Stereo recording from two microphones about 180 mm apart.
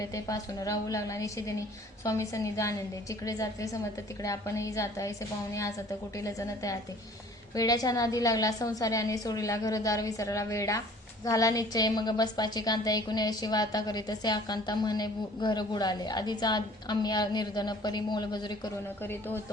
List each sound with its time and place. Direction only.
0.0 s a woman's voice: 20° left (ahead or behind)
6.1 s a woman's voice: 15° left (ahead or behind)
19.0 s a woman's voice: 10° left (ahead or behind)